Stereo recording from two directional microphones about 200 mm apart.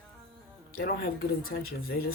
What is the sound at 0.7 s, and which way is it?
Speech, 50° left (ahead or behind).